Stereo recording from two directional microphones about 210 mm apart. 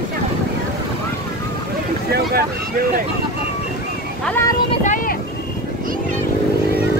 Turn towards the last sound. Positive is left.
turn(degrees=35)  # may be behind; listen again after turning